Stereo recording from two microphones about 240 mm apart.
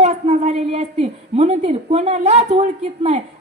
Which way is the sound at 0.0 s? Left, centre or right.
Right.